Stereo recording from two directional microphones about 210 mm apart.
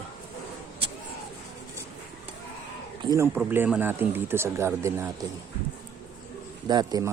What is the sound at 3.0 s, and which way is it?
Speech, 15° right (ahead or behind).